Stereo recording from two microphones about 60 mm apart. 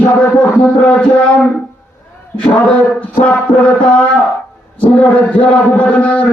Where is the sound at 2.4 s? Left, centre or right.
Left.